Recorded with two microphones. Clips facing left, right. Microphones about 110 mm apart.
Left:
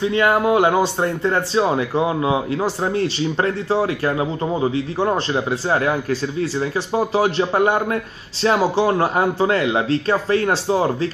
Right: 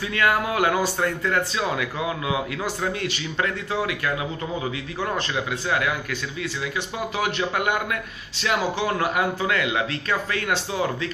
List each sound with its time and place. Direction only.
0.0 s speech: 25° left (ahead or behind)